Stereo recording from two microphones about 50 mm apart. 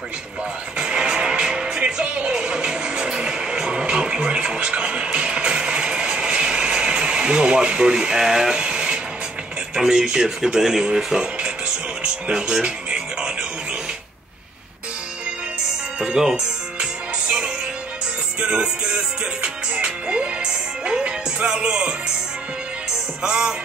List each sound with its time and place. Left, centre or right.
0.7 s music: centre
8.5 s a sound: centre
9.8 s speech: centre
11.3 s music: centre
16.1 s speech: centre
16.8 s music: centre
23.2 s speech: centre